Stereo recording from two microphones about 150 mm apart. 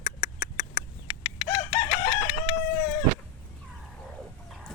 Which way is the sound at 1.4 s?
35° left (ahead or behind).